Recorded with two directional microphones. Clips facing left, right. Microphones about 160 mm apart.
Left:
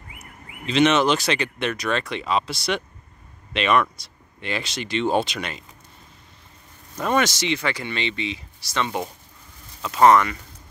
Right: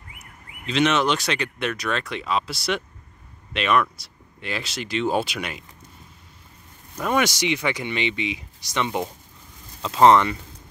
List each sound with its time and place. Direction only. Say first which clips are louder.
0.7 s speech: left 3 dB; centre (ahead or behind)
7.0 s speech: left 1 dB; 10° right (ahead or behind); by 10.3 s 25° right (ahead or behind)